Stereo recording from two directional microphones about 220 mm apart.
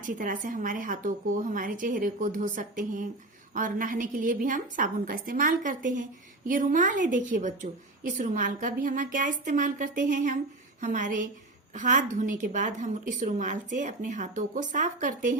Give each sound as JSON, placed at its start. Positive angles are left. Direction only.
{"t": 0.0, "sound": "a woman's voice", "side_deg": -35}